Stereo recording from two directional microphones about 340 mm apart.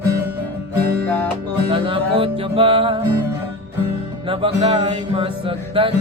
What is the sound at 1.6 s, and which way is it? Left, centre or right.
Music, centre.